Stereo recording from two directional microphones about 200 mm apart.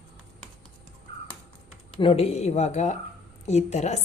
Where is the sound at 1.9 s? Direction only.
30° left (ahead or behind).